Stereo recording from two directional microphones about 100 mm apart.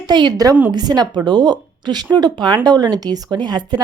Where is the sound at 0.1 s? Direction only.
50° right (ahead or behind).